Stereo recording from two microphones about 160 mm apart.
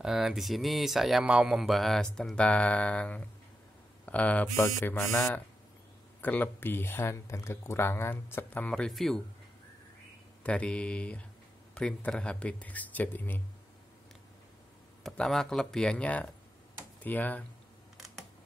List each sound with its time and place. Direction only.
0.0 s speech: 5° right (ahead or behind)
10.4 s speech: 5° left (ahead or behind)
15.0 s speech: 5° left (ahead or behind)
17.9 s computer keyboard: centre (ahead or behind)